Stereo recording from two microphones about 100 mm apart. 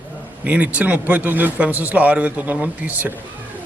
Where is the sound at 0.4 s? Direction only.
15° right (ahead or behind).